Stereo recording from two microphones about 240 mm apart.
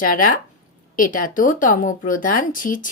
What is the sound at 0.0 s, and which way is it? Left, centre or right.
Speech, left.